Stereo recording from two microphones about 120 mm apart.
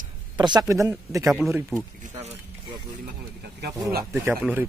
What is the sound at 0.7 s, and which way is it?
Speech, 25° right (ahead or behind).